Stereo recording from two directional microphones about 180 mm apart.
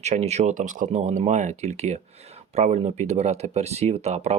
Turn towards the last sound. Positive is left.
turn(degrees=-35)  # may be behind; listen again after turning